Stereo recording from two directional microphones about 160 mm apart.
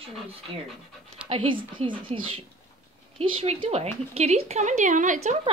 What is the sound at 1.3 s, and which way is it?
A woman's voice, 35° right (ahead or behind).